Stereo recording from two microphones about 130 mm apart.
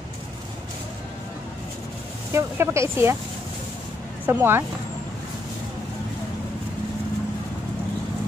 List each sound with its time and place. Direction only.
2.3 s speech: 20° right (ahead or behind)
4.3 s speech: 15° right (ahead or behind)